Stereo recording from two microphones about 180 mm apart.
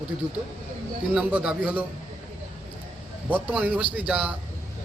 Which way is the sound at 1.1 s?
10° right (ahead or behind).